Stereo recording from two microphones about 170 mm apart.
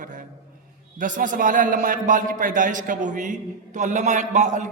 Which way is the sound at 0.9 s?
50° right (ahead or behind).